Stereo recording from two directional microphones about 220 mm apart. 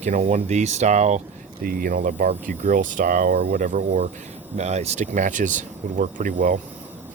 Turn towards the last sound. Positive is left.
turn(degrees=-10)  # may be behind; listen again after turning